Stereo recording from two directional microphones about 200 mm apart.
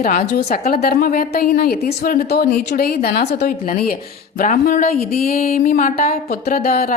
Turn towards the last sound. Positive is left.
turn(degrees=45)  # may be behind; listen again after turning